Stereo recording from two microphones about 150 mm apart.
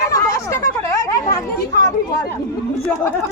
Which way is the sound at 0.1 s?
20° left (ahead or behind).